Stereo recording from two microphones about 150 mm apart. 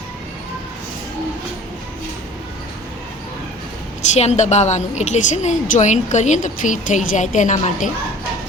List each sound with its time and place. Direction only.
4.1 s a woman's voice: 50° left (ahead or behind)